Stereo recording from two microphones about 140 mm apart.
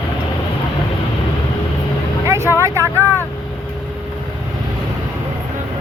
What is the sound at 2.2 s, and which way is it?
Vehicle, 20° right (ahead or behind).